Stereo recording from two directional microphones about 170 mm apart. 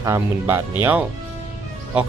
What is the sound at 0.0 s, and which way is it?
Speech, 15° right (ahead or behind).